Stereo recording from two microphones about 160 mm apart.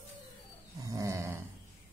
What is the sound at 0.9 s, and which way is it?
Speech, 20° right (ahead or behind).